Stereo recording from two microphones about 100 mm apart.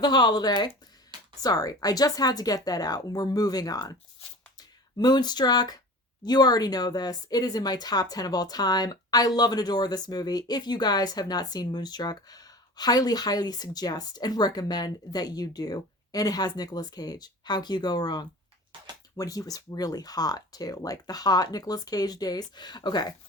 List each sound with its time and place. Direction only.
0.0 s speech: 45° left (ahead or behind)
4.9 s speech: 45° left (ahead or behind)